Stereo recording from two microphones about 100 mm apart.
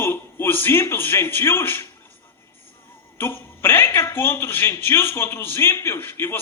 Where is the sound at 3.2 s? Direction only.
20° left (ahead or behind).